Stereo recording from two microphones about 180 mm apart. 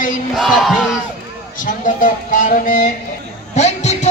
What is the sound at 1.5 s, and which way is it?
Speech, 45° left (ahead or behind).